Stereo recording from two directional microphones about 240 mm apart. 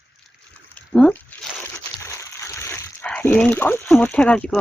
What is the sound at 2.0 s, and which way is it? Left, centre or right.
Dog, centre.